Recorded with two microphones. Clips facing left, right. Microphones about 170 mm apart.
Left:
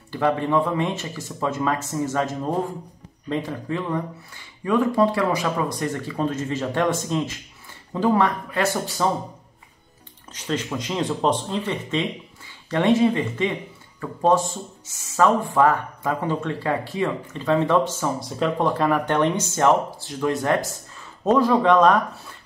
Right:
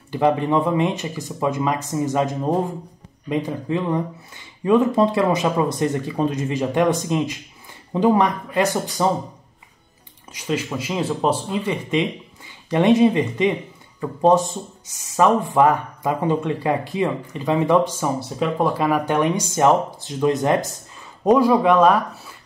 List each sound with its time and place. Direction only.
0.1 s speech: 20° right (ahead or behind)
10.3 s speech: 10° right (ahead or behind)